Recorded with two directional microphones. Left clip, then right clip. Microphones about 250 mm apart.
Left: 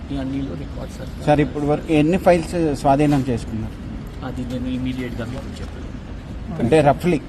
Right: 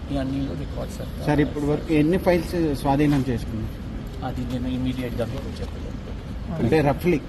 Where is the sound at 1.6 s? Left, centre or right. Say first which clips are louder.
Left 4 dB; left.